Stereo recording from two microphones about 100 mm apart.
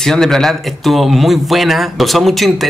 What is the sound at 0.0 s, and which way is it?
A man's voice, 5° left (ahead or behind).